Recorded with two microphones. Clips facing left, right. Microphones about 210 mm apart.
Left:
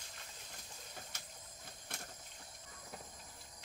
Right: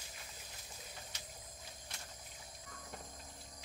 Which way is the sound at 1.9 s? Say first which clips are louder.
Left 7 dB; 55° left (ahead or behind).